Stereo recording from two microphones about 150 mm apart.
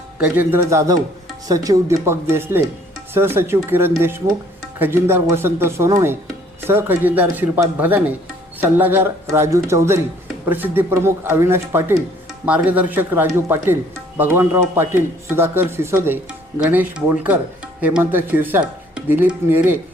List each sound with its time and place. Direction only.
0.2 s speech: 15° right (ahead or behind)